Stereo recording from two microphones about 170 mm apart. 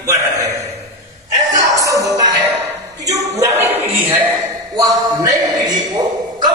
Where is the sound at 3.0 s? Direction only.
15° right (ahead or behind).